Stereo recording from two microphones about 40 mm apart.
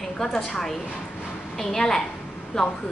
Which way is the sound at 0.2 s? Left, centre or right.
Centre.